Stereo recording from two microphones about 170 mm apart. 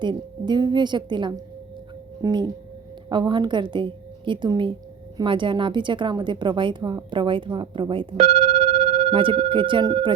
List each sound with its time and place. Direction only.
0.0 s a woman's voice: 25° right (ahead or behind)